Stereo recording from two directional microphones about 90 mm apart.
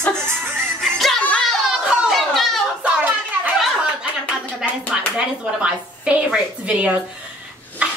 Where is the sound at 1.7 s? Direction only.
10° right (ahead or behind).